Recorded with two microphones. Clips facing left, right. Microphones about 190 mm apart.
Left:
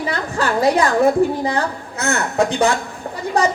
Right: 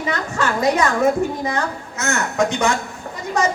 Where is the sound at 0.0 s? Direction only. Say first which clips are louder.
Left 1 dB; 35° left (ahead or behind).